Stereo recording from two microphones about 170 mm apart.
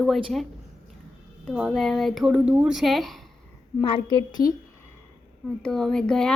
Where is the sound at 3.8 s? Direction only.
30° left (ahead or behind).